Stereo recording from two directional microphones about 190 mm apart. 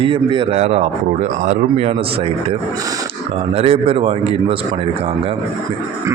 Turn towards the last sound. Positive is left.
turn(degrees=-30)  # may be behind; listen again after turning